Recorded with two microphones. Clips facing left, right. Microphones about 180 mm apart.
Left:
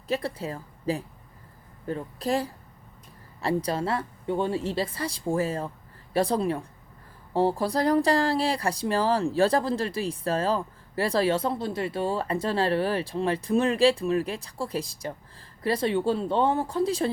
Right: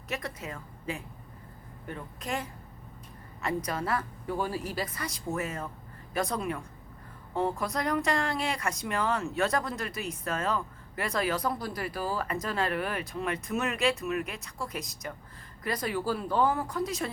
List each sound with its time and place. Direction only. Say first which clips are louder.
0.1 s speech: left 7 dB; 30° left (ahead or behind)